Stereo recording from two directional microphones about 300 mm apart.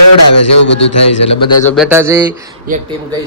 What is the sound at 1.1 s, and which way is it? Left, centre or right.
Speech, left.